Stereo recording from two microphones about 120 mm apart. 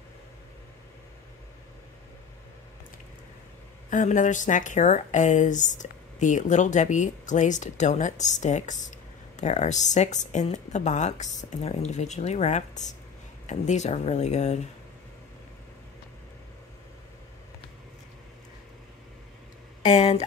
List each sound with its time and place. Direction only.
3.9 s speech: 90° left
9.4 s speech: 75° left (ahead or behind)
19.8 s a sound: 65° left (ahead or behind)